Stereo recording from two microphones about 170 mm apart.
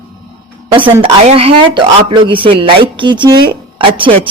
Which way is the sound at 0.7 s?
30° right (ahead or behind).